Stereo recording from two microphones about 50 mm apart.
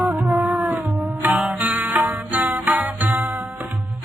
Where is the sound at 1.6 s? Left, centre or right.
Right.